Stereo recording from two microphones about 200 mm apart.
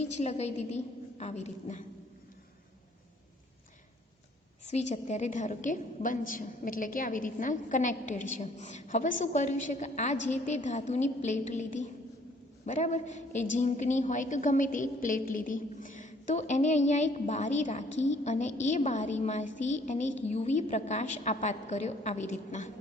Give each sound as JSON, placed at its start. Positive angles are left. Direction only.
{"t": 0.0, "sound": "a woman's voice", "side_deg": 35}
{"t": 4.6, "sound": "a woman's voice", "side_deg": 35}